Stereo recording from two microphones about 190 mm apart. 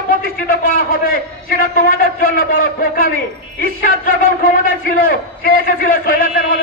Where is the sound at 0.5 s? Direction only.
50° left (ahead or behind).